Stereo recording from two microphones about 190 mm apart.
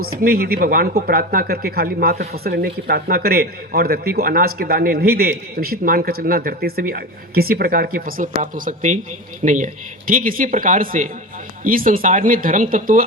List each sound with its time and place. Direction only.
0.0 s speech: 50° right (ahead or behind)